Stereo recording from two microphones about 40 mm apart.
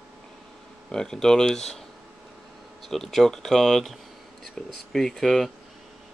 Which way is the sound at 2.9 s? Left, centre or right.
Centre.